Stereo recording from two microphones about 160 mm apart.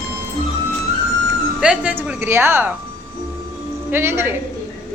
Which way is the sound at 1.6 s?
5° right (ahead or behind).